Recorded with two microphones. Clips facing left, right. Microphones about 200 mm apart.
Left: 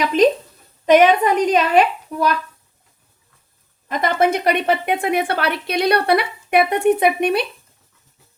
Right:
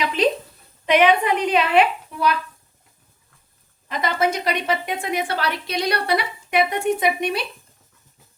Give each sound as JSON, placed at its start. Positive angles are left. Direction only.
{"t": 0.2, "sound": "a woman's voice", "side_deg": 45}
{"t": 3.8, "sound": "speech", "side_deg": 50}